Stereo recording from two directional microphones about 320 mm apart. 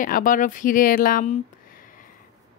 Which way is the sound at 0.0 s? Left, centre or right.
Left.